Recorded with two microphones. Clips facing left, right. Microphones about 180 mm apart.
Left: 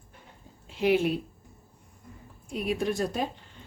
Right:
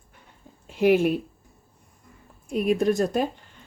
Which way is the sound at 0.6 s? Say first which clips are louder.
Right 5 dB; 50° right (ahead or behind).